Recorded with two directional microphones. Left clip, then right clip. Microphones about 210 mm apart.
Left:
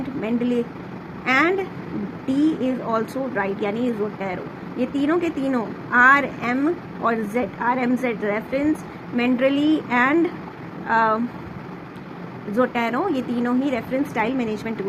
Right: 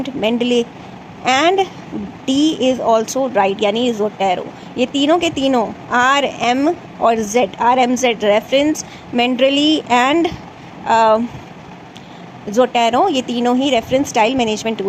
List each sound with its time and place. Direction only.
0.2 s speech: 30° right (ahead or behind)
12.5 s speech: 30° right (ahead or behind)